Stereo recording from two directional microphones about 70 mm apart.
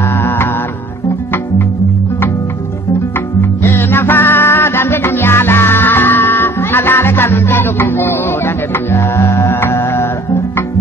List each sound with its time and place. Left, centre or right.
3.3 s music: left